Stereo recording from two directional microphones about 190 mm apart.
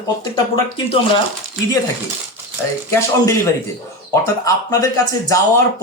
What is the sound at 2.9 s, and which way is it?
Speech, 15° left (ahead or behind).